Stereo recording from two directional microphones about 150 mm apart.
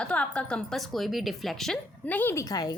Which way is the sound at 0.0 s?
5° left (ahead or behind).